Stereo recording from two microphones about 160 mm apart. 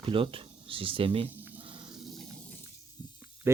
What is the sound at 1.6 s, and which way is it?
Snake, 30° right (ahead or behind).